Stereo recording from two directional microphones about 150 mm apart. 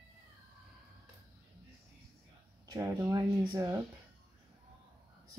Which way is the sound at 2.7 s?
20° right (ahead or behind).